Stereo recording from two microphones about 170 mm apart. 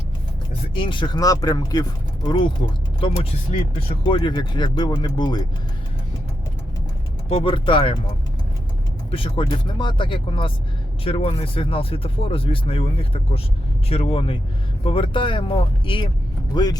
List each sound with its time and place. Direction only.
0.7 s speech: 30° left (ahead or behind)
3.8 s speech: 35° left (ahead or behind)
7.3 s speech: 35° left (ahead or behind)
9.0 s speech: 30° left (ahead or behind)